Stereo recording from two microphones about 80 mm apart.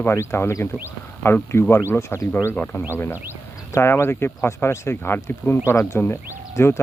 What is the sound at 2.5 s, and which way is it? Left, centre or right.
Speech, centre.